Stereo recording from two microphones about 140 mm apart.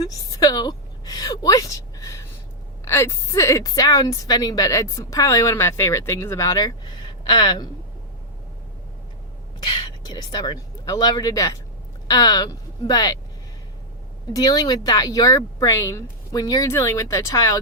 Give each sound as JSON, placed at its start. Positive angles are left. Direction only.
{"t": 0.0, "sound": "a woman's voice", "side_deg": 25}
{"t": 9.6, "sound": "a woman's voice", "side_deg": 30}
{"t": 14.3, "sound": "a woman's voice", "side_deg": 25}